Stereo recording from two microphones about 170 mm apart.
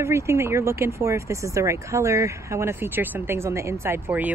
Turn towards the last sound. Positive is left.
turn(degrees=-10)  # may be behind; listen again after turning